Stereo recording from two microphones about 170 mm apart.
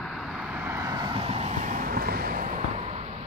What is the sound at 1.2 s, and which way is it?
Vehicle, 40° right (ahead or behind).